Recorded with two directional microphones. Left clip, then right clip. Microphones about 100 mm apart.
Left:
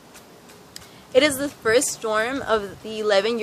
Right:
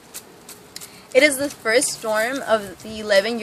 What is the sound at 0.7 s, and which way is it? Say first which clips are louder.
A woman's voice: right 1 dB; 35° left (ahead or behind).